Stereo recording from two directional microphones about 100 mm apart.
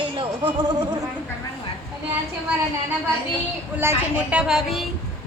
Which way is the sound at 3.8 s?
25° right (ahead or behind).